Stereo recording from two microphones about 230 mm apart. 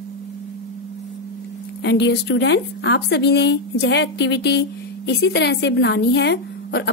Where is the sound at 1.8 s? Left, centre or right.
Left.